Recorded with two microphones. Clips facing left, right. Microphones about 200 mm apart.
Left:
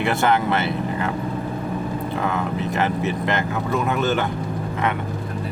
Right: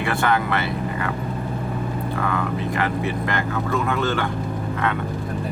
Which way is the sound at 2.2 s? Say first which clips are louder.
Even; 25° left (ahead or behind).